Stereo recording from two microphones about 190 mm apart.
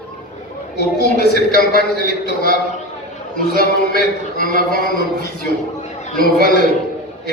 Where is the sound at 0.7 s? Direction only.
60° left (ahead or behind).